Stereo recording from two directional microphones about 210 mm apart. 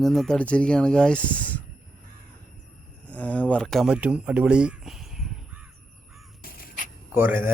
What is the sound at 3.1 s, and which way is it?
Speech, 5° left (ahead or behind).